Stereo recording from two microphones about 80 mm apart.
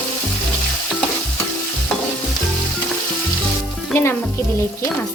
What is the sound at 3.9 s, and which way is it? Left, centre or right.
Speech, left.